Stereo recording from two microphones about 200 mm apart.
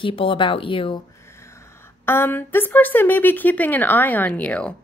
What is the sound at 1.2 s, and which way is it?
A woman's voice, 15° left (ahead or behind).